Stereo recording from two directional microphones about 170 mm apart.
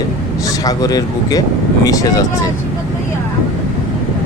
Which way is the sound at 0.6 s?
20° left (ahead or behind).